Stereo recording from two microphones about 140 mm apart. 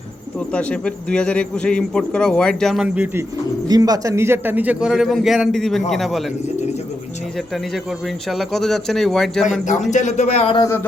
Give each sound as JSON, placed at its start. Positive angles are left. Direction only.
{"t": 0.3, "sound": "speech", "side_deg": 10}
{"t": 2.8, "sound": "a man's voice", "side_deg": -10}
{"t": 3.7, "sound": "a man's voice", "side_deg": -25}
{"t": 7.3, "sound": "a man's voice", "side_deg": 0}
{"t": 9.9, "sound": "speech", "side_deg": 60}
{"t": 10.6, "sound": "speech", "side_deg": 15}